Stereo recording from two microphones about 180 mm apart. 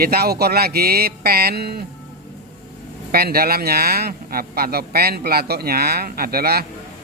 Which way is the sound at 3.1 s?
60° right (ahead or behind).